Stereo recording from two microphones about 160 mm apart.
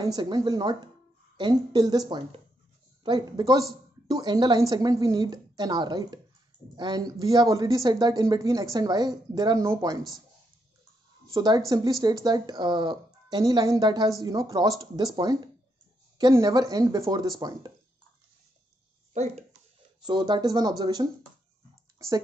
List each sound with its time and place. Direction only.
0.0 s speech: 25° right (ahead or behind)
11.3 s speech: 25° right (ahead or behind)
19.1 s speech: 45° right (ahead or behind)
20.1 s speech: 30° right (ahead or behind)
21.9 s typing: 20° right (ahead or behind)